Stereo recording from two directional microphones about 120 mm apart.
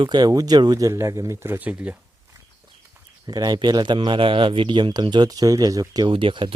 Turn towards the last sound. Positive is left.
turn(degrees=-45)  # may be behind; listen again after turning